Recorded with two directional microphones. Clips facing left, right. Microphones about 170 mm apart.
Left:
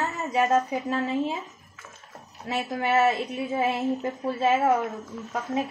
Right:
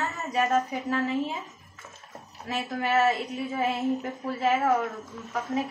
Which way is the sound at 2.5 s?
25° left (ahead or behind).